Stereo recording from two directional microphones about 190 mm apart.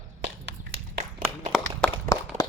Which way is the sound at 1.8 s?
5° left (ahead or behind).